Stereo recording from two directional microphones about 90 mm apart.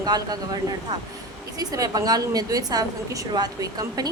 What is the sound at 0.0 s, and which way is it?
Speech, 45° right (ahead or behind).